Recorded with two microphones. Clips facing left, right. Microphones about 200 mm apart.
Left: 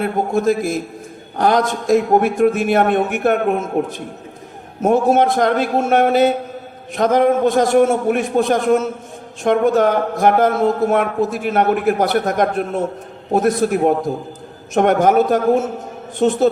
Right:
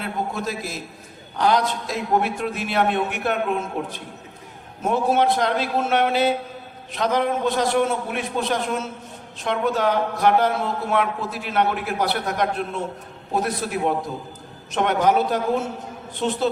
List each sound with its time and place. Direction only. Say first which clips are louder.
0.0 s a man's voice: left 10 dB; 50° left (ahead or behind)